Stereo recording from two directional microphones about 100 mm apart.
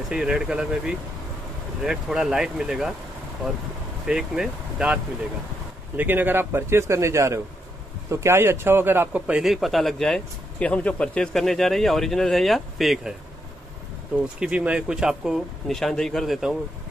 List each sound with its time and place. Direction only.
0.1 s speech: 5° right (ahead or behind)
4.0 s speech: 5° right (ahead or behind); by 9.2 s 20° right (ahead or behind)
9.3 s speech: 5° right (ahead or behind)
14.4 s speech: 10° right (ahead or behind)